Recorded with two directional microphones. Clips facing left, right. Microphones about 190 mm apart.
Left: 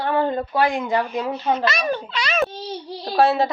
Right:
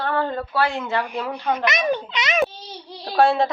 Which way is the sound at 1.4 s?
25° left (ahead or behind).